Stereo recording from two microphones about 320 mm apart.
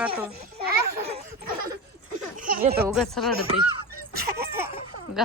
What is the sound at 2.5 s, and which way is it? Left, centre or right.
Speech, right.